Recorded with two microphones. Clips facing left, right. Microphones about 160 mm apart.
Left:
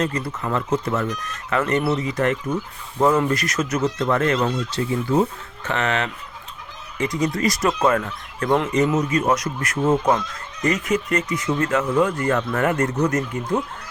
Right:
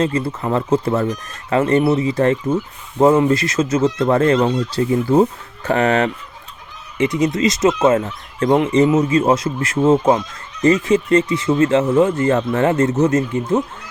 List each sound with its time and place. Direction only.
0.0 s speech: 25° right (ahead or behind)
7.0 s speech: 25° right (ahead or behind)